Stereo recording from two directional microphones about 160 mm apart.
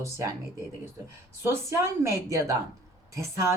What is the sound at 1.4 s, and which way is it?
Speech, 15° right (ahead or behind).